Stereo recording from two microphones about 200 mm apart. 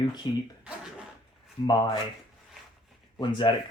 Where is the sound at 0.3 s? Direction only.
20° left (ahead or behind).